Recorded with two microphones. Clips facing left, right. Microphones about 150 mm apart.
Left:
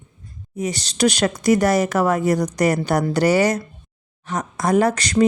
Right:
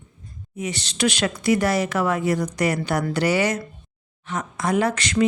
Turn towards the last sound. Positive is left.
turn(degrees=40)  # may be behind; listen again after turning